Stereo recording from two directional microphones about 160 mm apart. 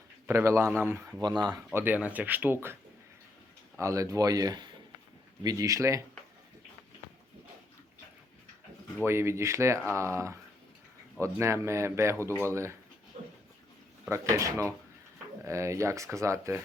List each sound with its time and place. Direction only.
0.3 s speech: 15° right (ahead or behind)
1.2 s speech: 25° right (ahead or behind)
1.7 s speech: 10° right (ahead or behind)
3.8 s speech: 20° right (ahead or behind)
9.0 s speech: 15° right (ahead or behind)
13.2 s a sound: 45° right (ahead or behind)
14.1 s speech: 20° right (ahead or behind)